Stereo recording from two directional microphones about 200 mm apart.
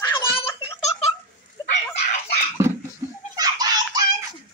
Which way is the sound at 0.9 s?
30° left (ahead or behind).